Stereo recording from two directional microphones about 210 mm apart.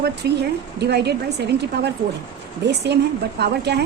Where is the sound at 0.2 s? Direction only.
55° right (ahead or behind).